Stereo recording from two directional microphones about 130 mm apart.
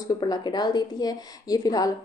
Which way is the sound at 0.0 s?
30° left (ahead or behind).